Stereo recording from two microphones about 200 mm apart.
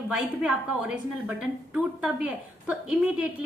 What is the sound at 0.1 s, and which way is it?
A woman's voice, 5° right (ahead or behind).